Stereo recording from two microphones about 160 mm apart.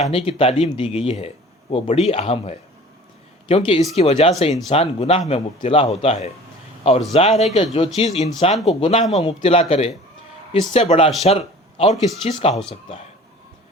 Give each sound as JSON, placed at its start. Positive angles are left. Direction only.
{"t": 0.0, "sound": "speech", "side_deg": 35}